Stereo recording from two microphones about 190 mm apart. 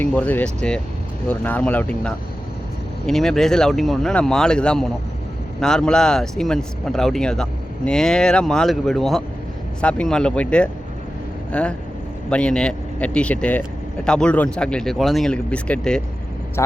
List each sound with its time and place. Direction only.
0.0 s speech: 10° left (ahead or behind)
16.6 s speech: 15° left (ahead or behind)